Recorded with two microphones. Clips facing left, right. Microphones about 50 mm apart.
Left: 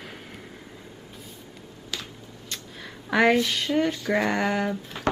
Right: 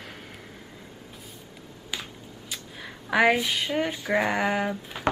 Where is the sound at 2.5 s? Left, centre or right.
Centre.